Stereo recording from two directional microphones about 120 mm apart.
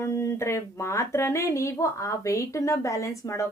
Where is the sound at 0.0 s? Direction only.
25° left (ahead or behind).